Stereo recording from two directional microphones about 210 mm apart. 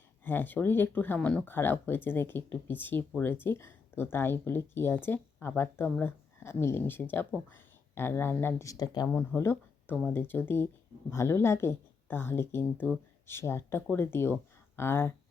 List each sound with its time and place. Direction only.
0.3 s a woman's voice: 10° left (ahead or behind)